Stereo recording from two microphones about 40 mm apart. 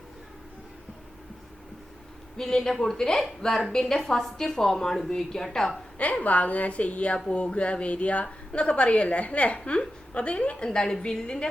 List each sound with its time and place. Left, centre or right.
2.4 s a woman's voice: centre
6.0 s a woman's voice: left